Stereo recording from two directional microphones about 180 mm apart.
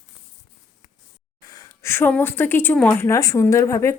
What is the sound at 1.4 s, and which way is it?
A woman's voice, 20° left (ahead or behind).